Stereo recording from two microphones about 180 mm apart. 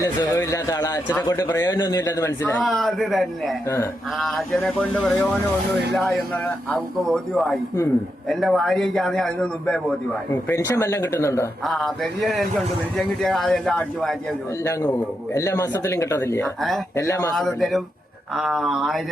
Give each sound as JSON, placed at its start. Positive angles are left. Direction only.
{"t": 0.0, "sound": "speech", "side_deg": 15}
{"t": 2.6, "sound": "a man's voice", "side_deg": 0}
{"t": 10.3, "sound": "speech", "side_deg": 15}
{"t": 11.6, "sound": "a man's voice", "side_deg": 0}
{"t": 14.6, "sound": "speech", "side_deg": 15}
{"t": 16.6, "sound": "a man's voice", "side_deg": 0}
{"t": 16.9, "sound": "speech", "side_deg": 15}
{"t": 17.3, "sound": "a man's voice", "side_deg": 0}